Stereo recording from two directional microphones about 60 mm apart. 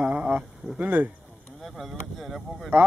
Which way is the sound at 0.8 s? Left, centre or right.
Right.